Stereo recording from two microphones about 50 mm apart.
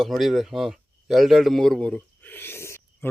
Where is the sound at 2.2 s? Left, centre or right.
Left.